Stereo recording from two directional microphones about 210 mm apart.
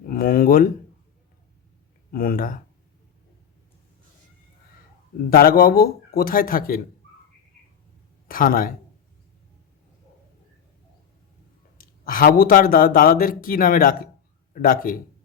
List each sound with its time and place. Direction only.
0.1 s a sound: 45° left (ahead or behind)
2.1 s speech: 45° left (ahead or behind)
5.3 s speech: 45° left (ahead or behind)
8.3 s a man's voice: 40° left (ahead or behind)
11.8 s a man's voice: 40° left (ahead or behind)